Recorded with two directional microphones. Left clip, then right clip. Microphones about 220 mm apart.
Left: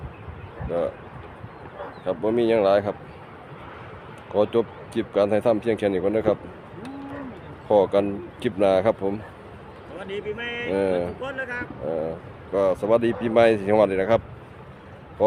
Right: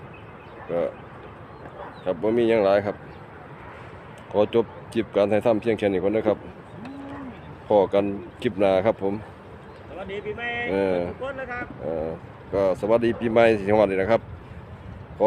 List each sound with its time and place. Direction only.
2.0 s speech: 5° right (ahead or behind)
4.3 s speech: 5° right (ahead or behind)
7.7 s speech: centre (ahead or behind)
10.0 s speech: 50° left (ahead or behind)
10.7 s speech: 5° right (ahead or behind)
11.2 s speech: 50° left (ahead or behind)
11.9 s speech: centre (ahead or behind)